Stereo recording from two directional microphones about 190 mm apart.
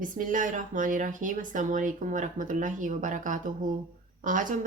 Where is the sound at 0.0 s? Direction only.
45° right (ahead or behind).